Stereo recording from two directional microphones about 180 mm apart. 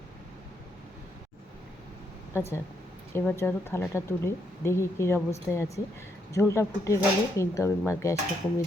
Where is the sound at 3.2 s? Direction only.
15° left (ahead or behind).